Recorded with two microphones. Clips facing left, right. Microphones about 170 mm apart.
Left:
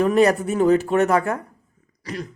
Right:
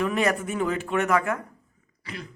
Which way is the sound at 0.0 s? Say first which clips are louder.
Left 8 dB; 35° left (ahead or behind).